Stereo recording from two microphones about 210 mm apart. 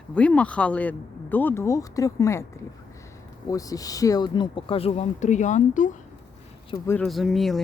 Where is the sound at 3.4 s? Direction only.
15° left (ahead or behind); by 6.0 s 35° left (ahead or behind).